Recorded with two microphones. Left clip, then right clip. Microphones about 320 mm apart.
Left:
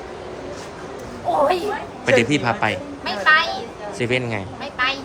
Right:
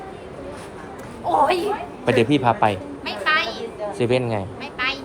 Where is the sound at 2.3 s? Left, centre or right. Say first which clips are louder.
Right 2 dB; centre.